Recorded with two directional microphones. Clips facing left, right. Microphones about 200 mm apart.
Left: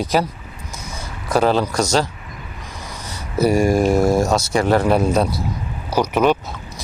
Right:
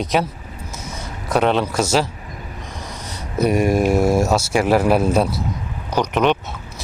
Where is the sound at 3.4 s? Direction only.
Centre (ahead or behind).